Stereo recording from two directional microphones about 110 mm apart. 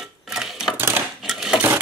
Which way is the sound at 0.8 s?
20° right (ahead or behind).